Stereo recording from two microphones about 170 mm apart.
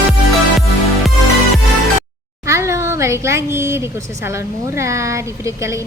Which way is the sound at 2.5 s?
15° right (ahead or behind).